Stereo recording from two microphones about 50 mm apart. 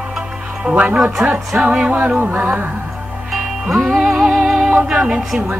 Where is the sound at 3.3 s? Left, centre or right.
Centre.